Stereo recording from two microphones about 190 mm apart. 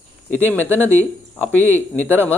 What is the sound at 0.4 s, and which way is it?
Speech, 10° left (ahead or behind).